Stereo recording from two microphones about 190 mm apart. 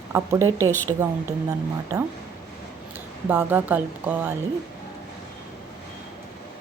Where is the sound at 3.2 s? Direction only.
10° right (ahead or behind).